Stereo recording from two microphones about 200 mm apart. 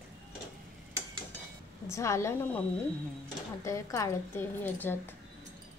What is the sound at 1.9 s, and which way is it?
Speech, 15° left (ahead or behind).